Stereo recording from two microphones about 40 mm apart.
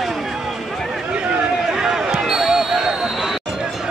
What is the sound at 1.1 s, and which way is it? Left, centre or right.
Chatter, right.